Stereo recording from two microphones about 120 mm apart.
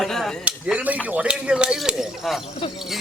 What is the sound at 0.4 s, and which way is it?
A man's voice, 10° right (ahead or behind).